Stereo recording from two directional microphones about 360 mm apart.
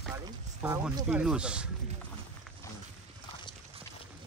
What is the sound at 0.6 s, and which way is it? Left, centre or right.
Speech, centre.